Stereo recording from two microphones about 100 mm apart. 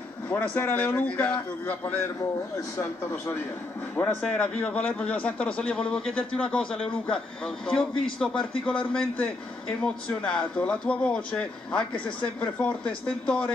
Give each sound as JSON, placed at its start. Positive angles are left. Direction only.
{"t": 0.3, "sound": "a man's voice", "side_deg": 15}
{"t": 2.5, "sound": "a man's voice", "side_deg": 25}
{"t": 4.0, "sound": "a man's voice", "side_deg": 10}